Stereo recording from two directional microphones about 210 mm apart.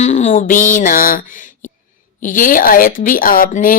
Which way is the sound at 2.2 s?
40° left (ahead or behind).